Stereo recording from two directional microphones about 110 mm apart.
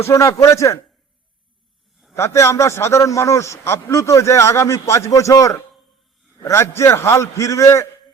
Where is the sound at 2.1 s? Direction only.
25° left (ahead or behind).